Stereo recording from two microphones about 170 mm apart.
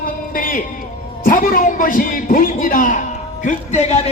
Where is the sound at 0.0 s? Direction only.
55° left (ahead or behind).